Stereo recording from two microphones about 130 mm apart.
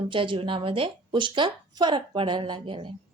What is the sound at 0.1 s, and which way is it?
A woman's voice, 40° right (ahead or behind).